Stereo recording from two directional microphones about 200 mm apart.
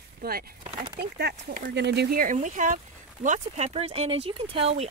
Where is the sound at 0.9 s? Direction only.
55° right (ahead or behind).